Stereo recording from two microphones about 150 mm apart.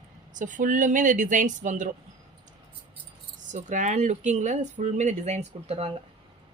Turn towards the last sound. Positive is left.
turn(degrees=-40)  # may be behind; listen again after turning